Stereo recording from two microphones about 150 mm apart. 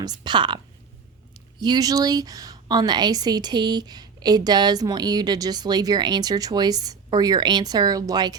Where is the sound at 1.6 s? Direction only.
25° right (ahead or behind).